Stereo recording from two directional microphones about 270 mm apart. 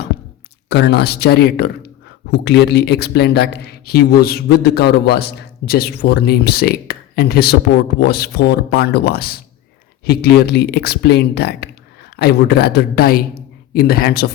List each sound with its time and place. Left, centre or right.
0.7 s a man's voice: left